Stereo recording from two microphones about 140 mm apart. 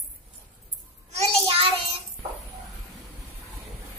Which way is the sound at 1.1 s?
45° right (ahead or behind).